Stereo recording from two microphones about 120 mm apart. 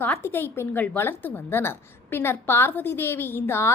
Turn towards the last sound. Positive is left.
turn(degrees=20)  # may be behind; listen again after turning